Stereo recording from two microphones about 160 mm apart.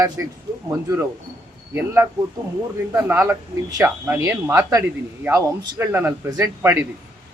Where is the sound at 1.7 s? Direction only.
15° right (ahead or behind).